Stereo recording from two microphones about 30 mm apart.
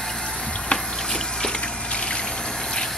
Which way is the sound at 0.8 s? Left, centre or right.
Centre.